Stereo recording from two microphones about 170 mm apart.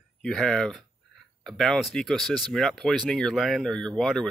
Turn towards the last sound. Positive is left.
turn(degrees=5)  # may be behind; listen again after turning